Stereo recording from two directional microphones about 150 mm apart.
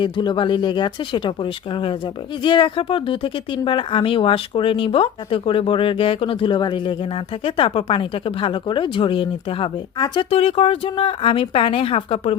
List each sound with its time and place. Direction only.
0.0 s speech: 30° left (ahead or behind)